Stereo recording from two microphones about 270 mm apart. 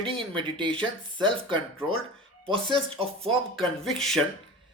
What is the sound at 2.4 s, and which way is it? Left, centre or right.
Speech, centre.